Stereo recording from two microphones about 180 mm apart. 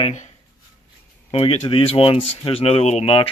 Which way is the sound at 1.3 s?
30° left (ahead or behind).